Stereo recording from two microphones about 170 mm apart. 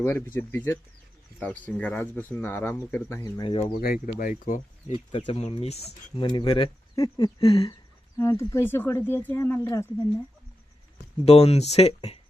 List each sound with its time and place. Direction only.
0.0 s speech: 10° left (ahead or behind)
3.4 s speech: 30° left (ahead or behind)
3.8 s speech: 55° left (ahead or behind)
4.9 s speech: 35° left (ahead or behind)
8.2 s speech: 15° left (ahead or behind)
10.9 s speech: 40° left (ahead or behind)